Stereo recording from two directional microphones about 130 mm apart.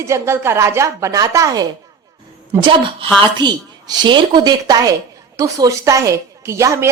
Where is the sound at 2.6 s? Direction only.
40° right (ahead or behind).